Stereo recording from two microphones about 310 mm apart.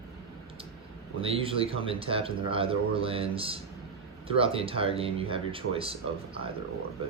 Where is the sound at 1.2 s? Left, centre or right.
Centre.